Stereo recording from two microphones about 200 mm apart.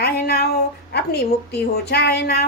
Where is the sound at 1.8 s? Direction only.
55° left (ahead or behind).